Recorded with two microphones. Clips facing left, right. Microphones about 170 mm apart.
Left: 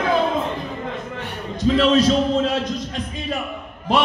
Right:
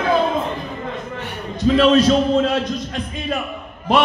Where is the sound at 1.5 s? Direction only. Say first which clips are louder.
Right 3 dB; 60° right (ahead or behind).